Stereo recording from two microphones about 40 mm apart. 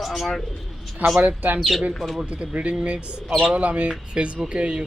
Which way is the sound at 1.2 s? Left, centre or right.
Right.